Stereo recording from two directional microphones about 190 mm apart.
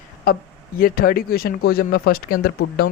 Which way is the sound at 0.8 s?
50° left (ahead or behind).